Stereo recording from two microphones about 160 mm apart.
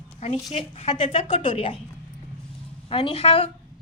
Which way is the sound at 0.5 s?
40° left (ahead or behind).